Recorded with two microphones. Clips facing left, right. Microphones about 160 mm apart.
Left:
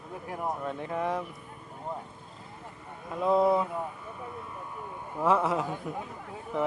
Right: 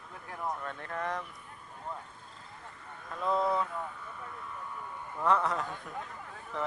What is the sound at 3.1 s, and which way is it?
Speech, 10° left (ahead or behind).